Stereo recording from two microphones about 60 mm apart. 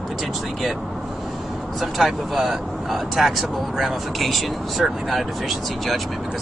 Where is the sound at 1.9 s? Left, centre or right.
Centre.